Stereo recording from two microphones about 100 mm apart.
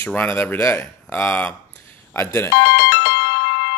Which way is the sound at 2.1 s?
30° left (ahead or behind).